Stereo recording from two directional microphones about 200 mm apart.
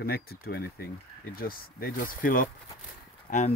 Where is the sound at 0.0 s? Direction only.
50° left (ahead or behind).